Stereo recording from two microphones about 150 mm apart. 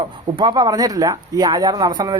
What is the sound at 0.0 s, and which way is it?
Speech, 30° right (ahead or behind).